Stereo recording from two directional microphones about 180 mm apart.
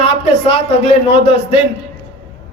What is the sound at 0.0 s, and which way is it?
A man's voice, 35° left (ahead or behind).